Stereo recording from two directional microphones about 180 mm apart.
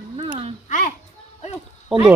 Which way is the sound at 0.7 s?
45° left (ahead or behind).